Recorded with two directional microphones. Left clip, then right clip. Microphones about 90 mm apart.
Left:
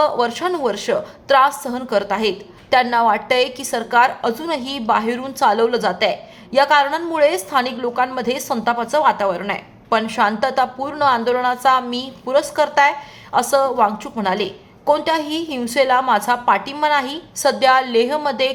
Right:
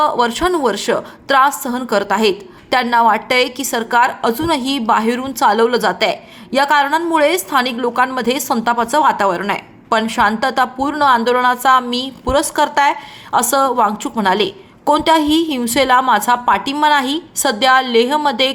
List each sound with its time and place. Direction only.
0.0 s a woman's voice: 40° right (ahead or behind)
2.7 s a woman's voice: 30° right (ahead or behind); by 10.0 s 55° right (ahead or behind)
10.0 s a woman's voice: 35° right (ahead or behind)
12.2 s a woman's voice: 55° right (ahead or behind); by 18.5 s 35° right (ahead or behind)